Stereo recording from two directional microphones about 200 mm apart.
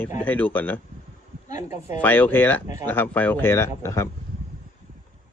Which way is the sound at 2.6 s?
15° right (ahead or behind).